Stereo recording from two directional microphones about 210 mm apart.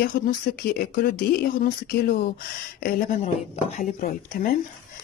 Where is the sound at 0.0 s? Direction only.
45° left (ahead or behind).